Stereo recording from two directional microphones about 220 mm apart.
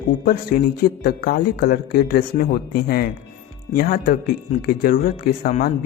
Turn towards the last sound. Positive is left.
turn(degrees=40)  # may be behind; listen again after turning